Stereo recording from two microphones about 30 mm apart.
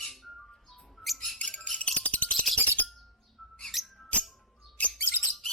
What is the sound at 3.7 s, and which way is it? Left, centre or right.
Music, centre.